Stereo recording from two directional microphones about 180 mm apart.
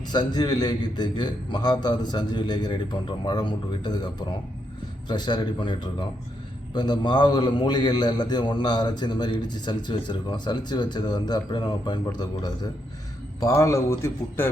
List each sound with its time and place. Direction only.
0.1 s a man's voice: 25° left (ahead or behind)